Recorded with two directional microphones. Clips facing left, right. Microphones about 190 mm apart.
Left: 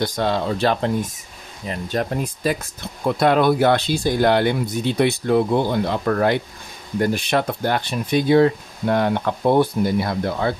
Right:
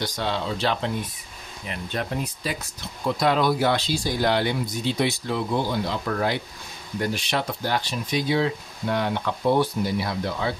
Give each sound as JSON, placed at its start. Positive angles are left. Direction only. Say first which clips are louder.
{"t": 0.0, "sound": "speech", "louder": "left 6 dB", "side_deg": 50}